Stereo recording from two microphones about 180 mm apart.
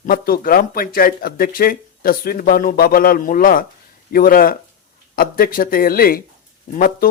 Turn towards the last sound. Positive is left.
turn(degrees=50)  # may be behind; listen again after turning